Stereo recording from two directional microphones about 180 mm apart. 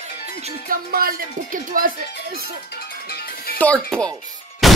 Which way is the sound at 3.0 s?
60° left (ahead or behind).